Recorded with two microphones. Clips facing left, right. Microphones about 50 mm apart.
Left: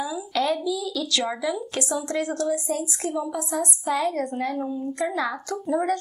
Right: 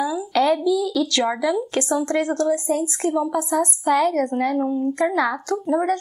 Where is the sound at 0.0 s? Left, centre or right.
Right.